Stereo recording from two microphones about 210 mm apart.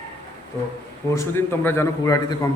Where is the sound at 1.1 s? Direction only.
10° left (ahead or behind).